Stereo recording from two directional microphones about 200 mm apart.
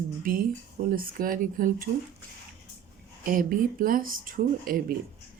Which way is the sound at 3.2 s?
45° right (ahead or behind).